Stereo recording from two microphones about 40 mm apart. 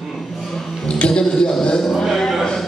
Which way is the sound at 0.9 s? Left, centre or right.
Left.